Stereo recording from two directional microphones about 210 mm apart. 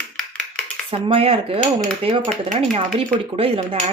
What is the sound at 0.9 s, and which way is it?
Speech, 25° right (ahead or behind).